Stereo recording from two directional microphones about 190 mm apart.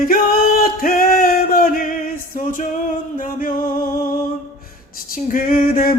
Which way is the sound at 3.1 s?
45° left (ahead or behind).